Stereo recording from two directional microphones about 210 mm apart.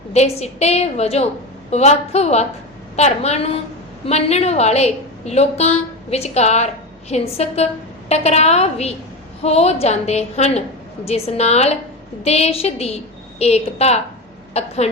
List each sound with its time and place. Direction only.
0.1 s a woman's voice: 30° left (ahead or behind)